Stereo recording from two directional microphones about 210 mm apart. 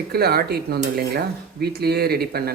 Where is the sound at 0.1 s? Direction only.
50° right (ahead or behind).